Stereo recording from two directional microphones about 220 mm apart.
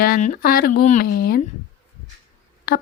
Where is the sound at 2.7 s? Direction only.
40° left (ahead or behind).